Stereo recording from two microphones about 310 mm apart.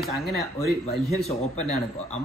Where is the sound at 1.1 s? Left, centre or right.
Left.